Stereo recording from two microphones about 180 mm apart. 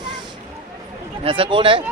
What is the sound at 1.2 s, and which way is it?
Speech, 30° right (ahead or behind).